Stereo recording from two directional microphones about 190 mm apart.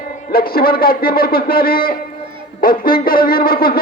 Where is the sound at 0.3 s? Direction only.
50° left (ahead or behind).